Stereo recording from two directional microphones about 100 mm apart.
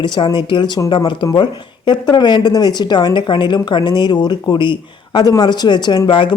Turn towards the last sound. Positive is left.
turn(degrees=55)  # may be behind; listen again after turning